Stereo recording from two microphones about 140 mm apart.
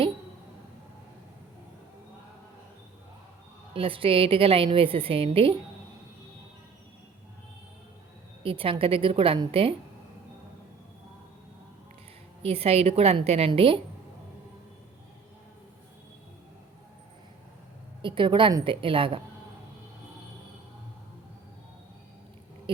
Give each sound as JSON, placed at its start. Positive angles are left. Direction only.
{"t": 3.8, "sound": "a woman's voice", "side_deg": -40}
{"t": 8.4, "sound": "a woman's voice", "side_deg": -40}
{"t": 12.4, "sound": "a woman's voice", "side_deg": -45}
{"t": 18.0, "sound": "a woman's voice", "side_deg": -35}